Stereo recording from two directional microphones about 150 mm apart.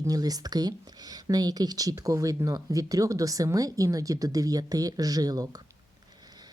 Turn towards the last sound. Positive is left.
turn(degrees=-25)  # may be behind; listen again after turning